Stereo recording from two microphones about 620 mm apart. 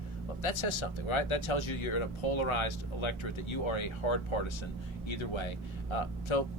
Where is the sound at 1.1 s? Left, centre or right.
Left.